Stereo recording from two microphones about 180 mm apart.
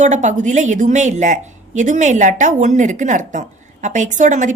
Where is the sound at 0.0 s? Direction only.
40° right (ahead or behind).